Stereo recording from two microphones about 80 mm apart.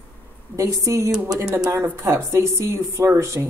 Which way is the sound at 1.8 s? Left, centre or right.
Right.